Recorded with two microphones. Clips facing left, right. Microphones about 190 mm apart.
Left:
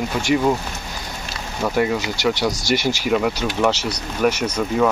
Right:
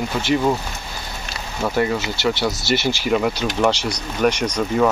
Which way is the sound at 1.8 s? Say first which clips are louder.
Left 1 dB; 15° left (ahead or behind).